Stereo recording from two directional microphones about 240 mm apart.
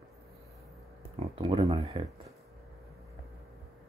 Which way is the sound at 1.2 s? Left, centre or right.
Right.